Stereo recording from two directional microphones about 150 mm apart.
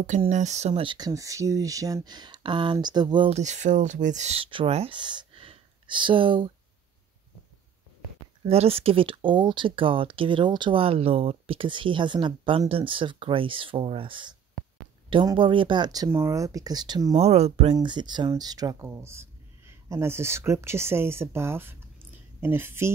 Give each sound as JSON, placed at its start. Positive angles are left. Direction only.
{"t": 0.3, "sound": "speech", "side_deg": -50}
{"t": 0.8, "sound": "speech", "side_deg": -25}
{"t": 3.3, "sound": "speech", "side_deg": -50}
{"t": 8.5, "sound": "speech", "side_deg": -40}
{"t": 17.1, "sound": "speech", "side_deg": -45}
{"t": 17.7, "sound": "speech", "side_deg": -30}